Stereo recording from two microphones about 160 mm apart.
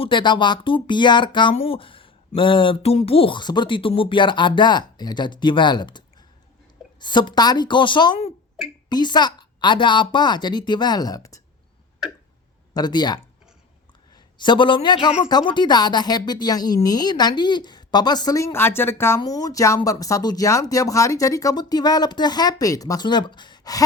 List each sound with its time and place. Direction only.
0.0 s speech: 30° left (ahead or behind)
7.0 s speech: 30° left (ahead or behind)
12.7 s speech: 25° left (ahead or behind)
14.3 s speech: 30° left (ahead or behind)